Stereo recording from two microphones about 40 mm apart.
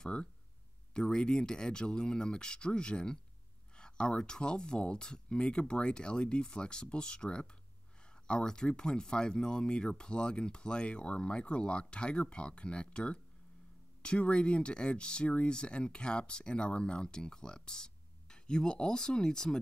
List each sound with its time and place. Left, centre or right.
0.0 s speech: left